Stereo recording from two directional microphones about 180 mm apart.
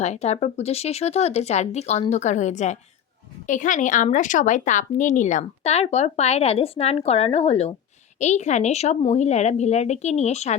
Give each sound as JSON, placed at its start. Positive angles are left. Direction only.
{"t": 0.0, "sound": "a woman's voice", "side_deg": 40}